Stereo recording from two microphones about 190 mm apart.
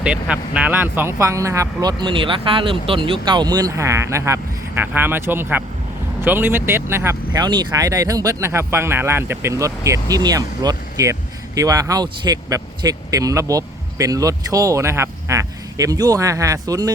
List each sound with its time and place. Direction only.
0.0 s speech: 5° right (ahead or behind)